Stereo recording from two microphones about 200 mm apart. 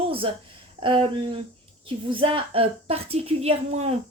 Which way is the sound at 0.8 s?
25° right (ahead or behind).